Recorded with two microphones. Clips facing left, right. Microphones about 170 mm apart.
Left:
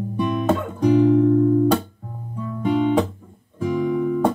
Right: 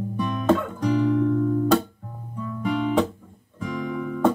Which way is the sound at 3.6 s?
5° left (ahead or behind).